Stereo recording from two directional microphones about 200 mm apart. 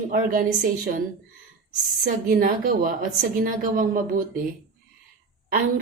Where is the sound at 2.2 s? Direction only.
45° right (ahead or behind).